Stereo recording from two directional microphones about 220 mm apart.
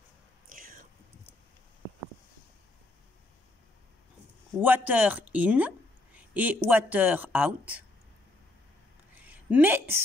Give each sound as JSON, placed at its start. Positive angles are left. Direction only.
{"t": 0.5, "sound": "a sound", "side_deg": -40}
{"t": 4.6, "sound": "speech", "side_deg": -10}
{"t": 9.2, "sound": "a woman's voice", "side_deg": -5}